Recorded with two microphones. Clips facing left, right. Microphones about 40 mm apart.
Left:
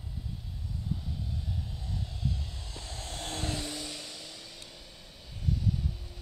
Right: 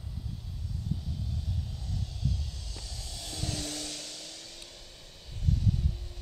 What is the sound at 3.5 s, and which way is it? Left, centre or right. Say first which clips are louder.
Vehicle: left 1 dB; centre.